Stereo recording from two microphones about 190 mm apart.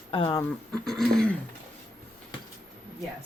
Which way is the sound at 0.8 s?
Centre (ahead or behind).